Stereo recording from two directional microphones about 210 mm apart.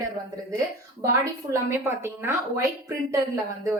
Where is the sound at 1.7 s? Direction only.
10° right (ahead or behind).